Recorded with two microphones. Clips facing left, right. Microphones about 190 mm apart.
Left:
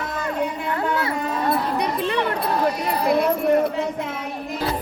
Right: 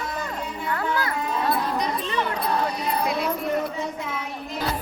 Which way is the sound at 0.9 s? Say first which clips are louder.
Left 2 dB; 25° left (ahead or behind).